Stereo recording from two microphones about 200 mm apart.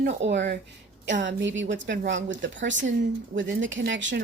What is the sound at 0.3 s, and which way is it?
A woman's voice, 55° right (ahead or behind).